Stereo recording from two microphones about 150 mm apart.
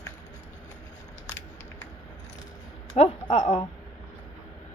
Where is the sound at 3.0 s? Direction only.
45° left (ahead or behind).